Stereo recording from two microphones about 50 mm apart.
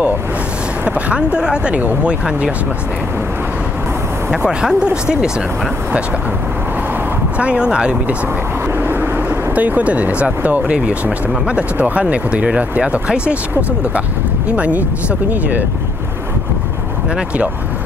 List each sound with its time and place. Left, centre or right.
0.8 s speech: right
4.5 s speech: centre
7.3 s speech: right
8.7 s vehicle: right
9.3 s speech: right